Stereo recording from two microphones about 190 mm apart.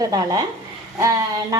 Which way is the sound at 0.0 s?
20° right (ahead or behind).